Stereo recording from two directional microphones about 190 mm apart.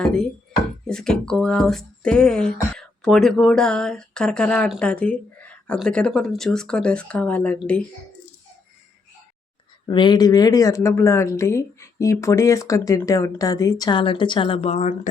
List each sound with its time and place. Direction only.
0.0 s speech: 5° left (ahead or behind)
9.8 s speech: 25° left (ahead or behind)